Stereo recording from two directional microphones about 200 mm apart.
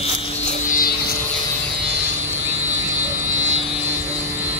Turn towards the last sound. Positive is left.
turn(degrees=-75)  # may be behind; listen again after turning